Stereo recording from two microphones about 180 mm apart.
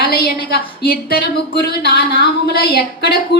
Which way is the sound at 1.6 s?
60° left (ahead or behind).